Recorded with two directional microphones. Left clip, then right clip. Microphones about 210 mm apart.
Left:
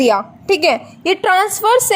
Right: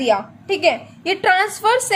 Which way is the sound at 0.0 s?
30° left (ahead or behind).